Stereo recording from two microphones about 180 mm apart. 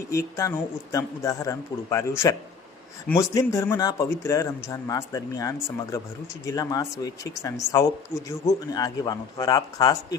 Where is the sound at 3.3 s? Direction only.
15° left (ahead or behind).